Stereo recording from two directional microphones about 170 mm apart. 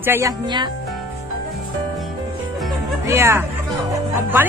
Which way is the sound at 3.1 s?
15° right (ahead or behind).